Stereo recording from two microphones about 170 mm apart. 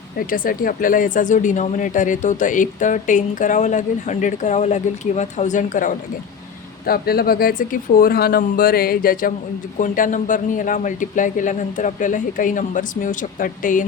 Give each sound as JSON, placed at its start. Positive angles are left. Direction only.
{"t": 0.3, "sound": "speech", "side_deg": 55}
{"t": 6.8, "sound": "speech", "side_deg": 65}